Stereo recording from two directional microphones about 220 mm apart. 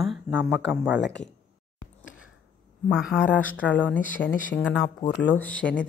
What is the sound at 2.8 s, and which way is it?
Speech, 5° right (ahead or behind).